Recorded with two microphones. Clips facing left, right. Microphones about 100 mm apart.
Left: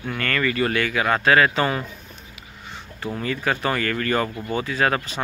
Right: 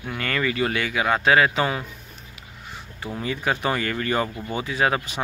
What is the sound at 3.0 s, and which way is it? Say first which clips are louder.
Speech: left 1 dB; 10° right (ahead or behind).